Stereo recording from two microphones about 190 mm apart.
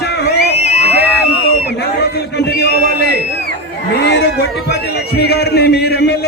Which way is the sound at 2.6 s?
60° left (ahead or behind).